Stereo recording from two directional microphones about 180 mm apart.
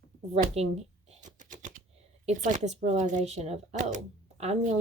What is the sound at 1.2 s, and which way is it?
Typing, 45° right (ahead or behind).